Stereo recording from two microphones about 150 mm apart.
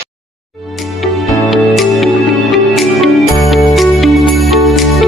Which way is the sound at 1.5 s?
Centre (ahead or behind).